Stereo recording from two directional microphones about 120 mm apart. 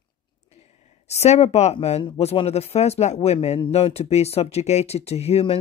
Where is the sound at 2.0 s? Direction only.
50° left (ahead or behind).